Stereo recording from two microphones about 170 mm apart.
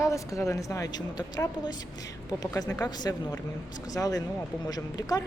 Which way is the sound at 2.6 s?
10° left (ahead or behind).